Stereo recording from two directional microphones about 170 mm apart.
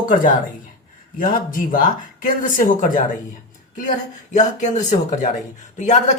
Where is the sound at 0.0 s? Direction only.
50° left (ahead or behind).